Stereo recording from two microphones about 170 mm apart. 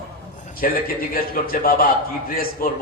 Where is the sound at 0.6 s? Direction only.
60° left (ahead or behind).